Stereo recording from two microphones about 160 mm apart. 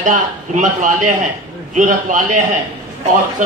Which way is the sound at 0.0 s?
55° right (ahead or behind).